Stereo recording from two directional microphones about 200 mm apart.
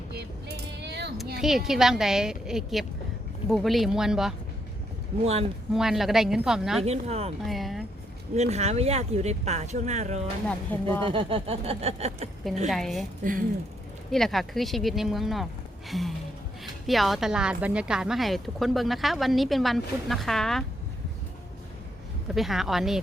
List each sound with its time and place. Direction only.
0.1 s a sound: 55° right (ahead or behind)
1.4 s speech: centre (ahead or behind)
5.2 s speech: 30° right (ahead or behind)
5.7 s speech: centre (ahead or behind)
6.8 s speech: 30° right (ahead or behind)
7.4 s speech: centre (ahead or behind)
8.4 s speech: 35° right (ahead or behind)
10.7 s speech: 10° left (ahead or behind)
11.0 s a sound: 25° right (ahead or behind)
12.6 s speech: centre (ahead or behind)
14.1 s speech: centre (ahead or behind)
22.4 s speech: centre (ahead or behind)